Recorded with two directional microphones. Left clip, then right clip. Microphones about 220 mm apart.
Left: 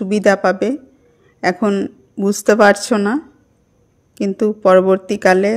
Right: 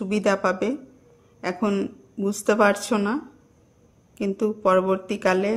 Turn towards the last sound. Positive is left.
turn(degrees=25)  # may be behind; listen again after turning